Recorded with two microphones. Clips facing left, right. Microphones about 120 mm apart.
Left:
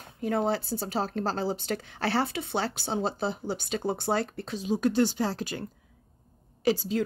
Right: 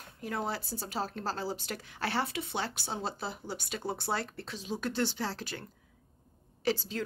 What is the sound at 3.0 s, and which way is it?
Speech, 25° left (ahead or behind).